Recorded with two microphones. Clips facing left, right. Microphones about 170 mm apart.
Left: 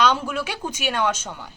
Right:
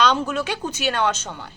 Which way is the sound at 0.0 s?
10° left (ahead or behind).